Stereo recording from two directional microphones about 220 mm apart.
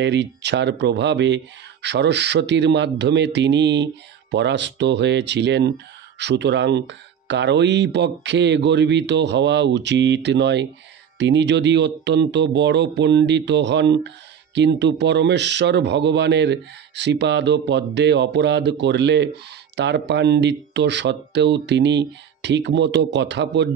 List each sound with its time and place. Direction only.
0.0 s speech: 50° right (ahead or behind)